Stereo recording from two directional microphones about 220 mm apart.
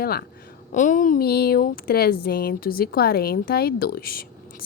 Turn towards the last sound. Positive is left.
turn(degrees=45)  # may be behind; listen again after turning